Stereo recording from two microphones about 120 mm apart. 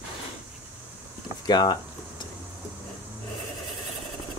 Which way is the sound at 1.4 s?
35° left (ahead or behind).